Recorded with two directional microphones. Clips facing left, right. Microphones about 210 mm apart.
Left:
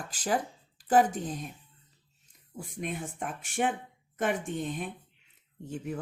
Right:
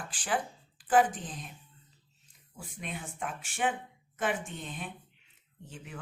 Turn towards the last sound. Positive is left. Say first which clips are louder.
# left 10 dB
turn(degrees=45)  # may be behind; listen again after turning